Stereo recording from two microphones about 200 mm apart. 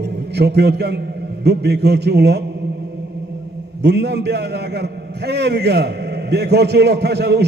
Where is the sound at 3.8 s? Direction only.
55° right (ahead or behind).